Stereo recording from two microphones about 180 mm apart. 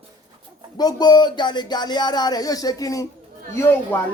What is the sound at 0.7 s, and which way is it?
Music, 20° left (ahead or behind).